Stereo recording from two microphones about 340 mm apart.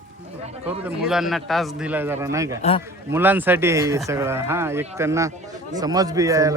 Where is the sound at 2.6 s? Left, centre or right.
Centre.